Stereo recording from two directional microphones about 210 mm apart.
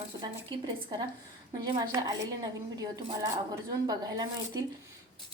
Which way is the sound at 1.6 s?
20° right (ahead or behind).